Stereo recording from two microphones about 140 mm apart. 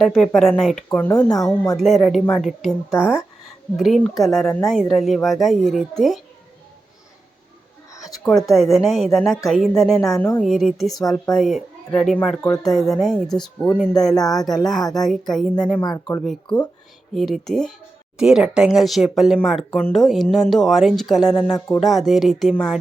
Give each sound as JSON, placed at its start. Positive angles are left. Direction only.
{"t": 0.0, "sound": "a woman's voice", "side_deg": 5}
{"t": 0.9, "sound": "speech", "side_deg": 15}
{"t": 1.7, "sound": "a woman's voice", "side_deg": 0}
{"t": 3.8, "sound": "a woman's voice", "side_deg": 0}
{"t": 8.3, "sound": "a woman's voice", "side_deg": 0}
{"t": 10.4, "sound": "a woman's voice", "side_deg": 0}
{"t": 15.9, "sound": "speech", "side_deg": 20}
{"t": 17.2, "sound": "a woman's voice", "side_deg": 0}